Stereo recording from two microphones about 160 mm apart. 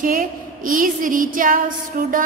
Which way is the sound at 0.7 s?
55° right (ahead or behind).